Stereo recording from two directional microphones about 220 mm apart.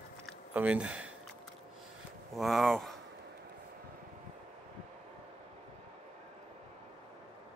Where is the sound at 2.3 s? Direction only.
Centre (ahead or behind).